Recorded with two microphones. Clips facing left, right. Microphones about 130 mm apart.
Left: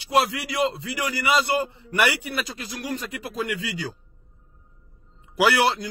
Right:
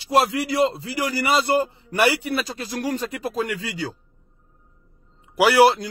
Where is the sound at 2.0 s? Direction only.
30° right (ahead or behind).